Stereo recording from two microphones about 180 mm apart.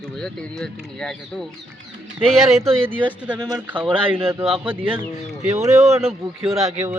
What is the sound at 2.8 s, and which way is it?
Speech, 10° right (ahead or behind).